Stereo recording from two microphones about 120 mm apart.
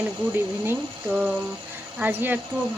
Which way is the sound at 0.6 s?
15° right (ahead or behind).